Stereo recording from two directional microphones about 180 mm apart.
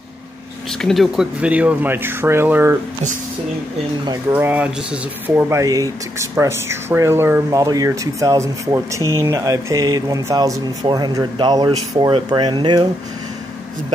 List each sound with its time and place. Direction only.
0.7 s speech: centre (ahead or behind)
4.3 s speech: 10° right (ahead or behind)